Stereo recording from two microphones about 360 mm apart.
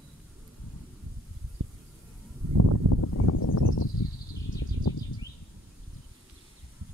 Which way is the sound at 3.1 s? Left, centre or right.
Left.